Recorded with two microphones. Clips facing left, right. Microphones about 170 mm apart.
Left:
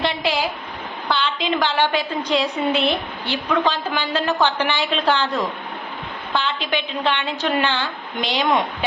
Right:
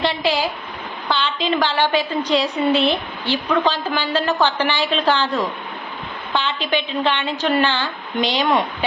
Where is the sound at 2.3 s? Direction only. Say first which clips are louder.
Right 2 dB; 35° right (ahead or behind).